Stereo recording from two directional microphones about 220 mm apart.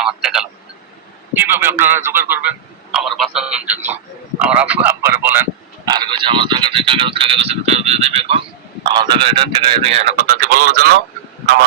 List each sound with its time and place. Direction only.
0.0 s vehicle: centre (ahead or behind)
1.3 s a man's voice: 10° right (ahead or behind); by 10.9 s 45° right (ahead or behind)